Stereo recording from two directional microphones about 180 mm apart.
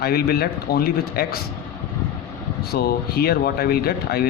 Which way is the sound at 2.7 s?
60° left (ahead or behind).